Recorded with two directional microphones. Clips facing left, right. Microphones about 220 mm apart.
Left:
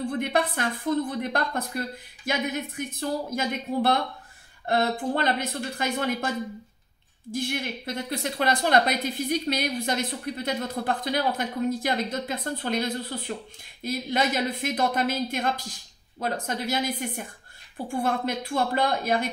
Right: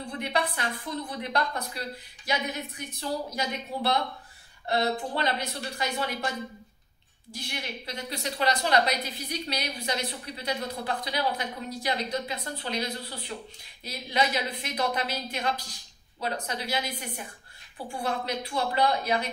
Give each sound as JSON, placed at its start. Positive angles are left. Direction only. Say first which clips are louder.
{"t": 0.0, "sound": "speech", "louder": "left 5 dB", "side_deg": 50}
{"t": 7.3, "sound": "speech", "louder": "left 8 dB", "side_deg": 50}